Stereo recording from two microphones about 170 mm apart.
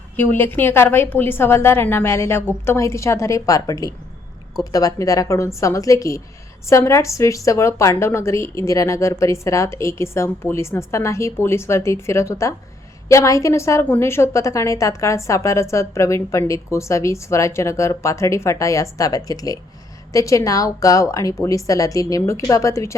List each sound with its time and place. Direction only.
0.2 s a woman's voice: 10° left (ahead or behind)